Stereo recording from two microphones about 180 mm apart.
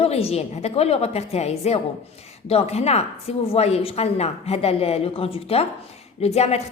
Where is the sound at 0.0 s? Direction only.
35° left (ahead or behind).